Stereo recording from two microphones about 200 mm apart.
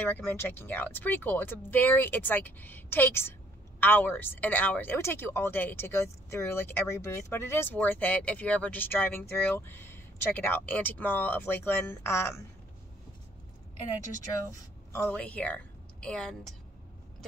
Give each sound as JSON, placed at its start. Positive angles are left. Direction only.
{"t": 0.0, "sound": "speech", "side_deg": 10}
{"t": 14.9, "sound": "a woman's voice", "side_deg": 10}